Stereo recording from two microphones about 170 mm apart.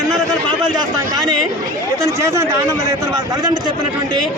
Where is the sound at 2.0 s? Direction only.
15° right (ahead or behind).